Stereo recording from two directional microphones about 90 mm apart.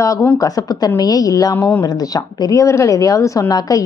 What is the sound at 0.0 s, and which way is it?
A woman's voice, 35° left (ahead or behind).